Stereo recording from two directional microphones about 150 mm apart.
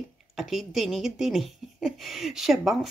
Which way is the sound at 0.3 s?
Centre (ahead or behind).